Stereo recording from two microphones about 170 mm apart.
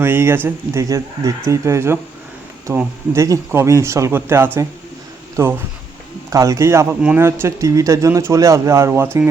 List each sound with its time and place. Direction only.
0.0 s speech: 15° right (ahead or behind)